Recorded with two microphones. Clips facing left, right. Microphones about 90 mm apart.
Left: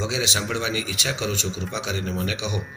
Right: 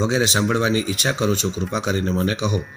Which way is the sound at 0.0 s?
45° right (ahead or behind).